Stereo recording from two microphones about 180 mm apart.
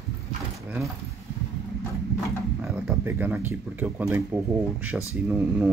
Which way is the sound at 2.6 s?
5° right (ahead or behind).